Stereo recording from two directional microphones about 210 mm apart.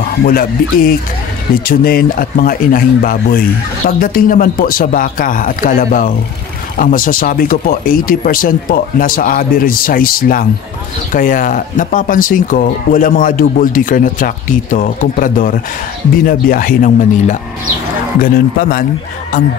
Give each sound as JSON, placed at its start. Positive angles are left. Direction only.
{"t": 0.2, "sound": "speech", "side_deg": 45}